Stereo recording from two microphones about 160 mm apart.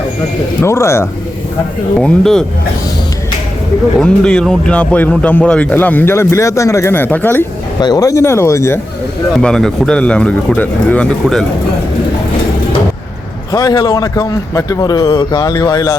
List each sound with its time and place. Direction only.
0.6 s a man's voice: 15° left (ahead or behind)
2.0 s speech: 5° left (ahead or behind)
4.0 s a man's voice: 5° left (ahead or behind)
7.8 s a man's voice: 25° left (ahead or behind)
9.3 s speech: 5° left (ahead or behind)
13.5 s a man's voice: 25° left (ahead or behind)